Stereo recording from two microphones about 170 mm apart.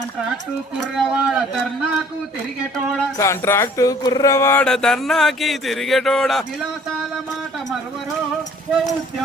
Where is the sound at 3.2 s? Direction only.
15° left (ahead or behind).